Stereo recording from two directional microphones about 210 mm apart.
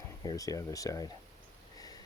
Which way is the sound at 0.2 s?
15° left (ahead or behind).